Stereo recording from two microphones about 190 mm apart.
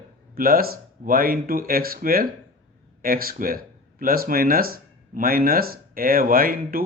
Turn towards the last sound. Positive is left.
turn(degrees=-50)  # may be behind; listen again after turning